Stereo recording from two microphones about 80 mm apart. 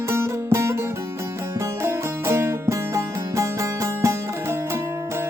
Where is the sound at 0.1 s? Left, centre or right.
Right.